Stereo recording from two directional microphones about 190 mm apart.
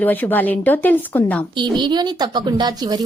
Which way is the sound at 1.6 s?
25° right (ahead or behind).